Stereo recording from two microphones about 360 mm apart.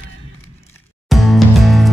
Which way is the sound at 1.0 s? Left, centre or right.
Centre.